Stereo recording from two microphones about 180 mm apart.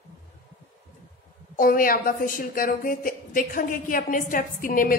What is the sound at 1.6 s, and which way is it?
Speech, 50° left (ahead or behind).